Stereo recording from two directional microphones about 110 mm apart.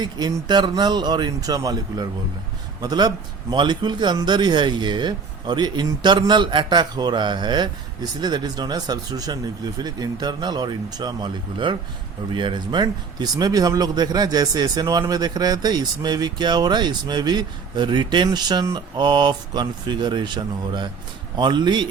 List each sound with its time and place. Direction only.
0.0 s speech: 40° right (ahead or behind)